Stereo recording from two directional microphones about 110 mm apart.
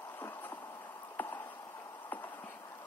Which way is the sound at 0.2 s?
20° left (ahead or behind).